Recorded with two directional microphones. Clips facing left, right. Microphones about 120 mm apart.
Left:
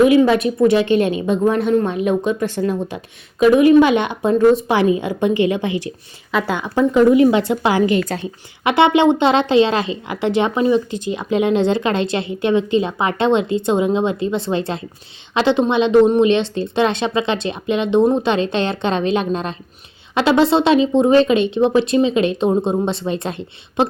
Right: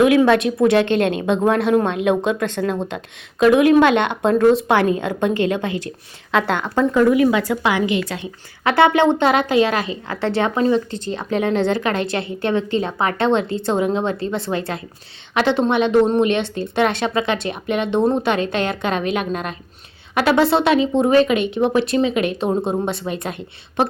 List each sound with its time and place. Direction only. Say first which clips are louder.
0.0 s speech: left 1 dB; 75° right (ahead or behind)
1.5 s speech: even; 80° right
2.6 s speech: left 1 dB; 70° right (ahead or behind)
4.7 s a woman's voice: left 1 dB; 55° right (ahead or behind)
6.3 s a woman's voice: even; 5° left (ahead or behind); by 8.3 s 40° left (ahead or behind)
8.6 s a woman's voice: left 1 dB; 20° left (ahead or behind)